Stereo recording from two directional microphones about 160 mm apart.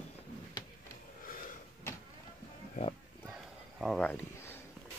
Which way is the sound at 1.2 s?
55° left (ahead or behind).